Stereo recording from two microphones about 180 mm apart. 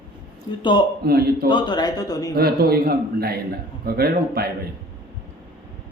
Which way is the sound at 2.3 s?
60° right (ahead or behind).